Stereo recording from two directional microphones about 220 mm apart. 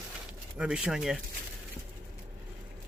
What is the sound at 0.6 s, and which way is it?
Speech, 5° right (ahead or behind).